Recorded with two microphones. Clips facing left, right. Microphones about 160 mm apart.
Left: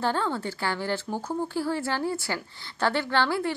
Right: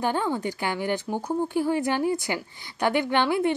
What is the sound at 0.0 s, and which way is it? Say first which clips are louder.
Speech: right 2 dB; 15° right (ahead or behind).